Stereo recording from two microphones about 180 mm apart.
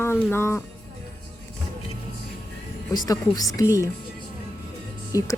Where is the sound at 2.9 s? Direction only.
20° left (ahead or behind).